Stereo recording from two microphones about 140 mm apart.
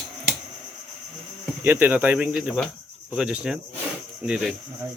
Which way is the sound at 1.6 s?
15° right (ahead or behind).